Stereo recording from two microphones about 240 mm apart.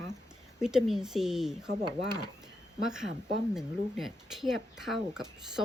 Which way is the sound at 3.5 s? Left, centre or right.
Centre.